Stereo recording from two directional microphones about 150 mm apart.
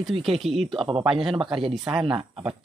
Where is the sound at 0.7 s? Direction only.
35° right (ahead or behind).